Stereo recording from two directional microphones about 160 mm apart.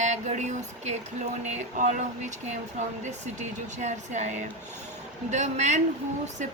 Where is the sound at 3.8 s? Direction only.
45° right (ahead or behind).